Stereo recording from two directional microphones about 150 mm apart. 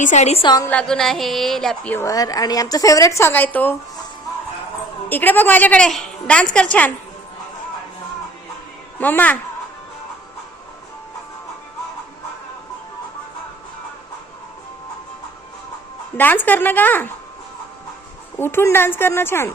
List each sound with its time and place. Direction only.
0.0 s a woman's voice: 50° left (ahead or behind)
0.4 s a woman's voice: 25° left (ahead or behind)
0.7 s a woman's voice: 5° left (ahead or behind)
2.0 s a woman's voice: 25° left (ahead or behind)
5.0 s a woman's voice: 10° left (ahead or behind)
9.0 s a woman's voice: 10° left (ahead or behind)
16.1 s a woman's voice: 10° left (ahead or behind)
18.3 s a woman's voice: 15° left (ahead or behind)